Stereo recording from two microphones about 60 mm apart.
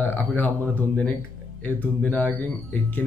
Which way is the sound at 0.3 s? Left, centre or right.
Left.